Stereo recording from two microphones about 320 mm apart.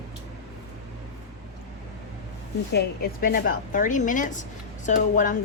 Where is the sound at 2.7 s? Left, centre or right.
Left.